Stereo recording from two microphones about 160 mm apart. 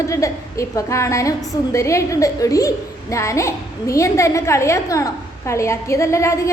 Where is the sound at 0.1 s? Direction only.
20° left (ahead or behind).